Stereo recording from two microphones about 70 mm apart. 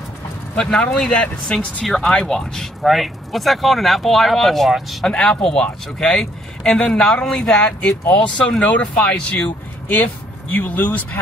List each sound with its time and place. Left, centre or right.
0.6 s speech: centre
5.0 s speech: centre